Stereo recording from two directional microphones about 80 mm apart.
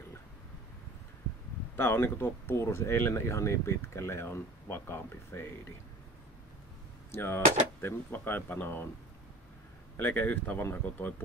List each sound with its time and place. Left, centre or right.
1.8 s speech: left
7.1 s speech: left
9.9 s speech: left